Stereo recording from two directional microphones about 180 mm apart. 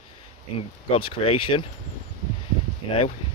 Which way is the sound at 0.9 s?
30° left (ahead or behind).